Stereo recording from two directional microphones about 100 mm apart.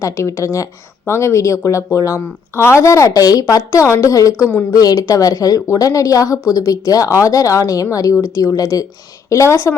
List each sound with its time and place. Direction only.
0.0 s speech: 30° left (ahead or behind)